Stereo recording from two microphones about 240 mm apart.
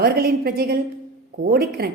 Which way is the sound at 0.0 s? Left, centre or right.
Right.